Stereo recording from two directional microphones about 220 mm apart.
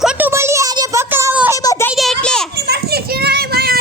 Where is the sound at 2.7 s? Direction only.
45° right (ahead or behind).